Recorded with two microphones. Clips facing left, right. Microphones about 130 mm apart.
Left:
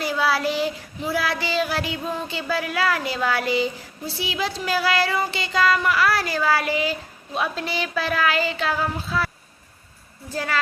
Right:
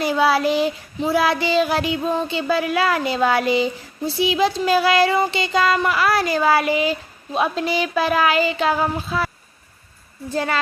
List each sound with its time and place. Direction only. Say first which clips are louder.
0.0 s child singing: right 5 dB; 20° right (ahead or behind)
7.3 s speech: right 5 dB; 20° right (ahead or behind)
10.3 s child singing: right 4 dB; 25° right (ahead or behind)